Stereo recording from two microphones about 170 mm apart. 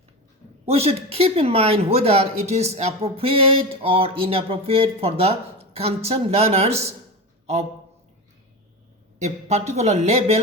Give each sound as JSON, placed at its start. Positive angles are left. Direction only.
{"t": 0.6, "sound": "a woman's voice", "side_deg": -35}
{"t": 9.2, "sound": "a woman's voice", "side_deg": -40}